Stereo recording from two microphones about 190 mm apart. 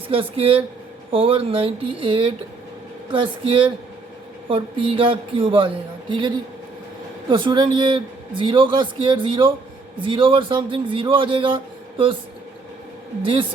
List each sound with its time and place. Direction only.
0.1 s speech: 30° right (ahead or behind)